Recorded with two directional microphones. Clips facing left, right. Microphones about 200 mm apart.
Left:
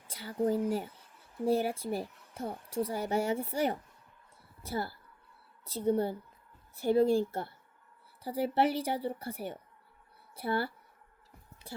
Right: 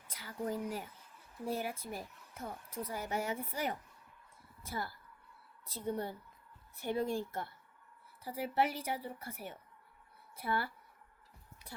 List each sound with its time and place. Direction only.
0.1 s speech: 30° left (ahead or behind)